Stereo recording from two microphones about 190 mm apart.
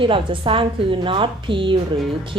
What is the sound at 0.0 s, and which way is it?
Speech, 25° right (ahead or behind).